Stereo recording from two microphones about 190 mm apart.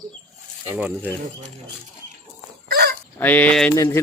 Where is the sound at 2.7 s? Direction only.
55° right (ahead or behind).